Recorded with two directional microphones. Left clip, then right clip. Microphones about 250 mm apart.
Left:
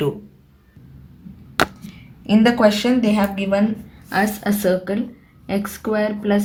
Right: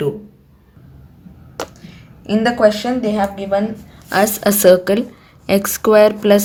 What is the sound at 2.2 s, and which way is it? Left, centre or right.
A woman's voice, centre.